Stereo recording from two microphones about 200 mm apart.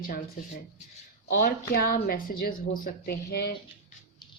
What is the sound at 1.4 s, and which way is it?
A woman's voice, 50° left (ahead or behind).